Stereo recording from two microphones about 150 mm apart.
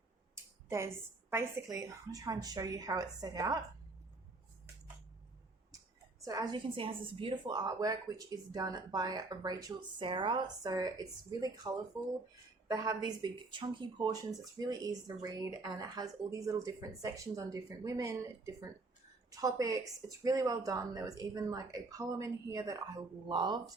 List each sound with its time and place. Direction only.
0.3 s a woman's voice: 15° right (ahead or behind)
6.2 s a woman's voice: 30° right (ahead or behind)
12.7 s a woman's voice: 25° right (ahead or behind)